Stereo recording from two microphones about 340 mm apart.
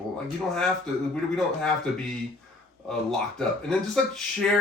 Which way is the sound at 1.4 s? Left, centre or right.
Centre.